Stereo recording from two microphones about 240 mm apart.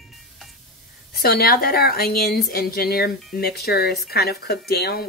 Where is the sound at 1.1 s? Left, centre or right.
Left.